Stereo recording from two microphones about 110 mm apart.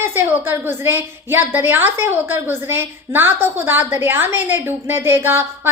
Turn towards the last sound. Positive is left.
turn(degrees=-20)  # may be behind; listen again after turning